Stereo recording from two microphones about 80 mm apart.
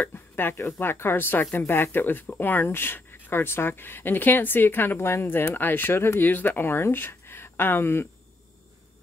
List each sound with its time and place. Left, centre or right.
0.0 s speech: left